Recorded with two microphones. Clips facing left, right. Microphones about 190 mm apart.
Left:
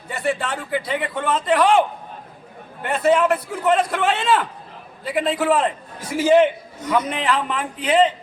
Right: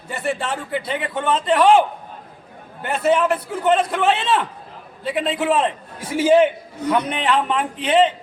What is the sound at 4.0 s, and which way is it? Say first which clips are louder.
Speech: right 1 dB; centre (ahead or behind).